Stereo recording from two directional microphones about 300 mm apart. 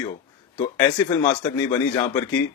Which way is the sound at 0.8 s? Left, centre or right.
Centre.